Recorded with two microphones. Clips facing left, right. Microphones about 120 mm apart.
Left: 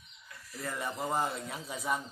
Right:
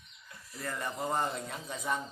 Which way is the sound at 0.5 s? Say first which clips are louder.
Even; 5° left (ahead or behind).